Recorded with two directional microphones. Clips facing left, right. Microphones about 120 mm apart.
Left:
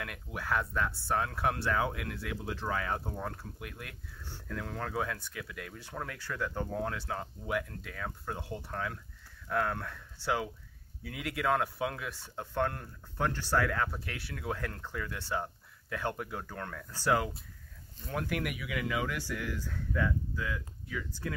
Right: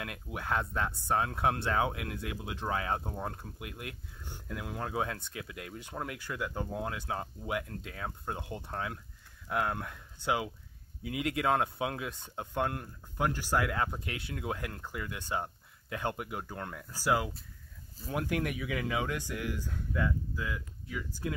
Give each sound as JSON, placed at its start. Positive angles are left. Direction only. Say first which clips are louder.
{"t": 0.0, "sound": "speech", "louder": "right 1 dB", "side_deg": -20}
{"t": 18.1, "sound": "speech", "louder": "right 2 dB", "side_deg": -20}